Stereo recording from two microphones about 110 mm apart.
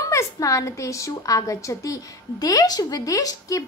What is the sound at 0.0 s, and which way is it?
A woman's voice, 30° left (ahead or behind).